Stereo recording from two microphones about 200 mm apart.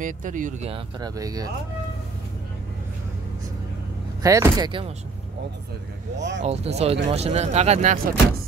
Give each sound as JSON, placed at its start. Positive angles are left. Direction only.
{"t": 0.0, "sound": "speech", "side_deg": -40}
{"t": 4.2, "sound": "speech", "side_deg": -15}
{"t": 6.1, "sound": "speech", "side_deg": -60}
{"t": 6.4, "sound": "speech", "side_deg": -30}